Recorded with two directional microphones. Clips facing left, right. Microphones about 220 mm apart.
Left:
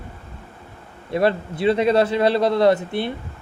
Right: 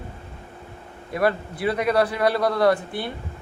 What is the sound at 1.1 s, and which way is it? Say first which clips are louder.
Speech: left 3 dB; 25° left (ahead or behind).